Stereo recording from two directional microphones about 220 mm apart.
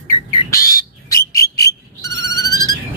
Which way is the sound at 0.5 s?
15° left (ahead or behind).